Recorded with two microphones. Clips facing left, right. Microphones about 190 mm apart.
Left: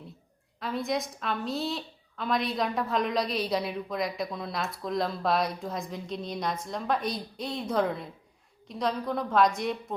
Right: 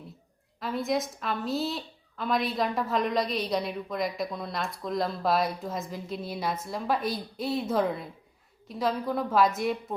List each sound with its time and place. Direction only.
0.6 s a woman's voice: centre (ahead or behind)